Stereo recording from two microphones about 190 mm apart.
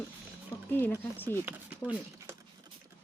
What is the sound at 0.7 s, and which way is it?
Speech, 10° left (ahead or behind).